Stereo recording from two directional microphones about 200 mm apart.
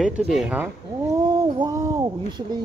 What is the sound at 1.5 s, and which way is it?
Speech, 20° right (ahead or behind).